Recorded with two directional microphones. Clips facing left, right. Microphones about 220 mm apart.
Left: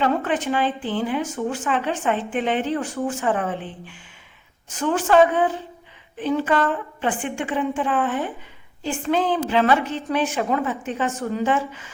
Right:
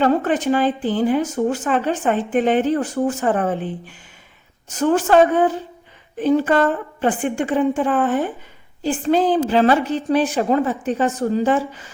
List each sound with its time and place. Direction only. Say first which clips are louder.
0.0 s a woman's voice: right 5 dB; 40° right (ahead or behind)